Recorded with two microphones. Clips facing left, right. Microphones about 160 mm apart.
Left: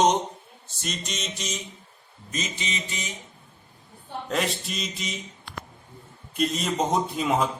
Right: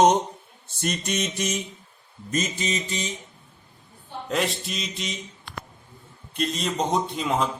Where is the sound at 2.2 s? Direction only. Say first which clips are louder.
Right 6 dB; 45° right (ahead or behind).